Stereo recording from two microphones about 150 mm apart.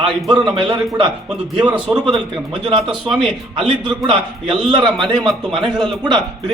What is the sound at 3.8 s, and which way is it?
Speech, 30° right (ahead or behind).